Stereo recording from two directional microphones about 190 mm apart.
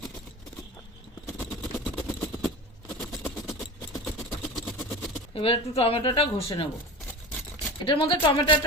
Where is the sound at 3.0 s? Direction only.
Centre (ahead or behind).